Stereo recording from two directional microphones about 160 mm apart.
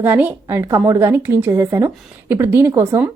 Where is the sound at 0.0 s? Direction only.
10° right (ahead or behind).